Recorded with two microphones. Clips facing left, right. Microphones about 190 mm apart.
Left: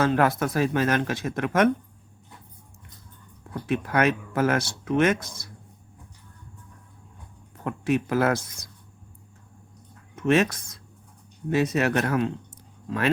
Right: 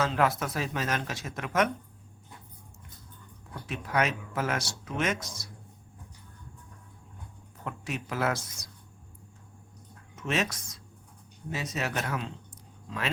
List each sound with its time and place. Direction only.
0.0 s speech: 55° left (ahead or behind)
3.7 s speech: 60° left (ahead or behind)
7.6 s speech: 55° left (ahead or behind)
10.2 s speech: 60° left (ahead or behind)